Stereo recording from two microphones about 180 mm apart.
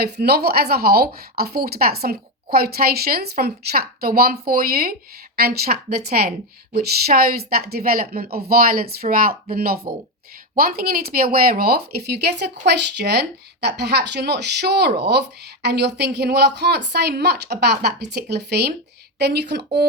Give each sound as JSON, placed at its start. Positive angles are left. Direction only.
{"t": 0.0, "sound": "a woman's voice", "side_deg": -60}